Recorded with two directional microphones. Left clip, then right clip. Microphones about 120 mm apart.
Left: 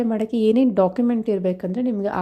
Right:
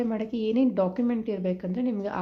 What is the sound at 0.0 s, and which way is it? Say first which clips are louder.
A woman's voice: left 8 dB; 50° left (ahead or behind).